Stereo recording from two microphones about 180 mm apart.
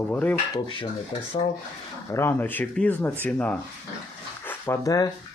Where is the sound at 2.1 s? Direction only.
10° left (ahead or behind).